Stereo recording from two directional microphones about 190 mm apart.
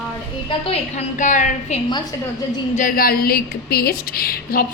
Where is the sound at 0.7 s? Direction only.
40° left (ahead or behind).